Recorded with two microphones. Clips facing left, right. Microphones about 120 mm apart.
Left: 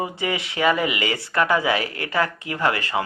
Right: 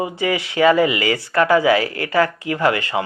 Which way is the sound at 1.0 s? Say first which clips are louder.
Right 4 dB; 25° left (ahead or behind).